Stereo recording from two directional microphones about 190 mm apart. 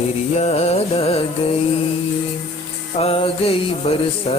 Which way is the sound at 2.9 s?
30° left (ahead or behind).